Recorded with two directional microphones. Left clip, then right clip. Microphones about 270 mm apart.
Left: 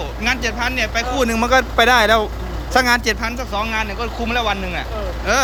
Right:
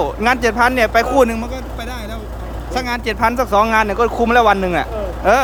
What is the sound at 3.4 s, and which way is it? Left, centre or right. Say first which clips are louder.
Speech: right 8 dB; right.